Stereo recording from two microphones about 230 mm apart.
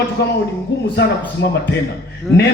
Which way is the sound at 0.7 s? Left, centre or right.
Left.